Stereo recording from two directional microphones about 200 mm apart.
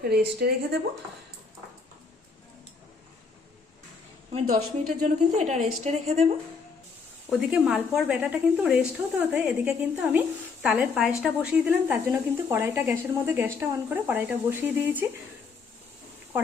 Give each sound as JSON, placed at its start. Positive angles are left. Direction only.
{"t": 0.0, "sound": "speech", "side_deg": -50}
{"t": 4.3, "sound": "a woman's voice", "side_deg": -30}
{"t": 7.3, "sound": "a woman's voice", "side_deg": -5}